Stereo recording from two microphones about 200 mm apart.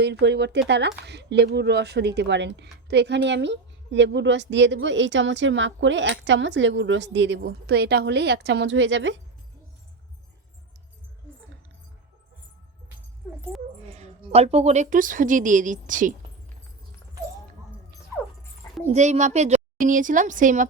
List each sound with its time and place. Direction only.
0.0 s a woman's voice: 60° right (ahead or behind)
13.8 s a woman's voice: 30° right (ahead or behind)
18.9 s a woman's voice: 35° right (ahead or behind)